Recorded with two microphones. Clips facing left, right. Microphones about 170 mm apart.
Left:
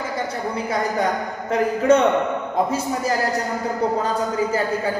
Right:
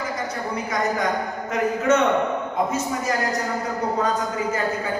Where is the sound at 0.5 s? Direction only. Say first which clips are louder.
Left 1 dB; 30° left (ahead or behind).